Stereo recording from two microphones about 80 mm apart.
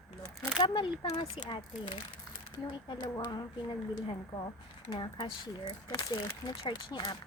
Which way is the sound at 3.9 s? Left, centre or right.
Left.